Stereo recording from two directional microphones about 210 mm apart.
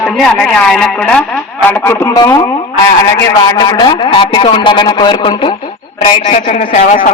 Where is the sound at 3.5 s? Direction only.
20° left (ahead or behind).